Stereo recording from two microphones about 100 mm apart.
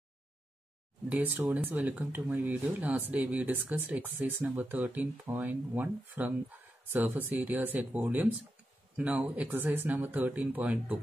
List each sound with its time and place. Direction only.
1.0 s speech: 15° right (ahead or behind)